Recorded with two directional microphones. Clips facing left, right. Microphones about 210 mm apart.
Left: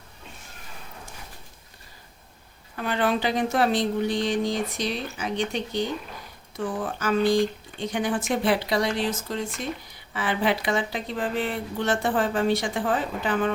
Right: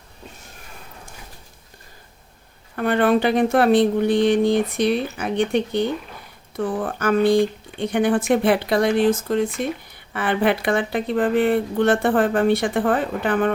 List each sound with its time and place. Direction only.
2.7 s speech: 55° right (ahead or behind)